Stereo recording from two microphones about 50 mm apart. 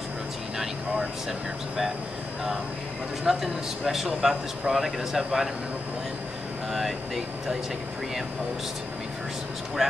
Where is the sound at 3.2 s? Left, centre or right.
Centre.